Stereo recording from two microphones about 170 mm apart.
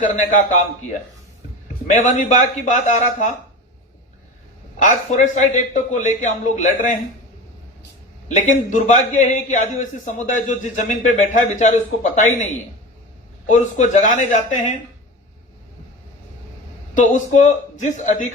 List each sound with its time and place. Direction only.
0.0 s a man's voice: 45° left (ahead or behind)
1.9 s a man's voice: 45° left (ahead or behind)
4.8 s a man's voice: 45° left (ahead or behind)
8.4 s a man's voice: 45° left (ahead or behind)
13.5 s a man's voice: 45° left (ahead or behind)
16.9 s a man's voice: 45° left (ahead or behind)